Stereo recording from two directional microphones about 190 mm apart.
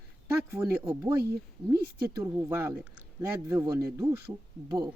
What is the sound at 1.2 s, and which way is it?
Speech, 55° right (ahead or behind).